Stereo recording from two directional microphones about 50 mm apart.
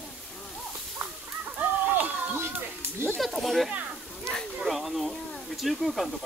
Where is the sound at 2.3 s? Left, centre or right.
Right.